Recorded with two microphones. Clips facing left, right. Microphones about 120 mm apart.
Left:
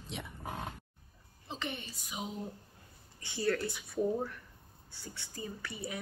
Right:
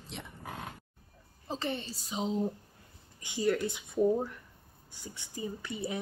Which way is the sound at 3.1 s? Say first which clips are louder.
Right 3 dB; 15° right (ahead or behind).